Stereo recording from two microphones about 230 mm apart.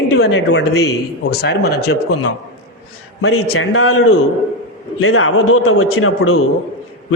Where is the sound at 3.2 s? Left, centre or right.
Left.